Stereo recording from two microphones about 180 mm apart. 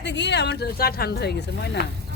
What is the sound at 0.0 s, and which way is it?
Speech, 75° left (ahead or behind).